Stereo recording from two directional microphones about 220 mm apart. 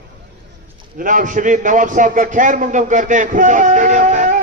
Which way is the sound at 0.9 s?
35° right (ahead or behind).